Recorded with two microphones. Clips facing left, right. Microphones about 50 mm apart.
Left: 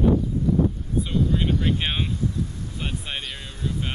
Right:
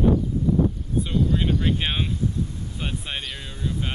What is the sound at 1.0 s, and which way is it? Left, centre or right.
Speech, centre.